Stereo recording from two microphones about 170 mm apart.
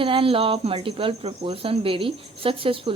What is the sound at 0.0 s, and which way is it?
Speech, 30° right (ahead or behind).